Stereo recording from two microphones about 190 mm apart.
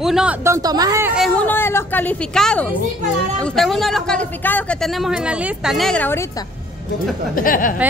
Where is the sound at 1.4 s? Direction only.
10° left (ahead or behind).